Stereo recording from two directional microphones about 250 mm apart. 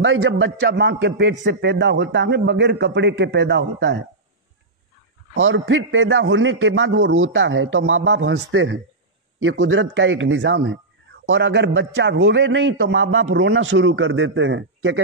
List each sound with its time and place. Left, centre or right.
0.0 s a man's voice: right
5.3 s a man's voice: right